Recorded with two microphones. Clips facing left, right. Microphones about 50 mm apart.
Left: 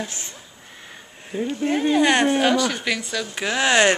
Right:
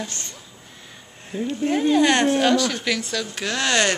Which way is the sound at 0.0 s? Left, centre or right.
Centre.